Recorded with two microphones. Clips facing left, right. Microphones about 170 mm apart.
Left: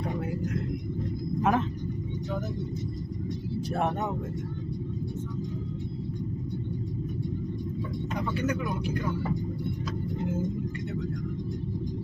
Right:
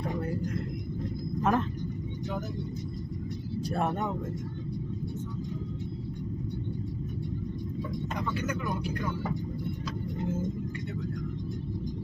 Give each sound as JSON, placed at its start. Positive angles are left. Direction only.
{"t": 1.4, "sound": "speech", "side_deg": 5}
{"t": 3.7, "sound": "speech", "side_deg": 0}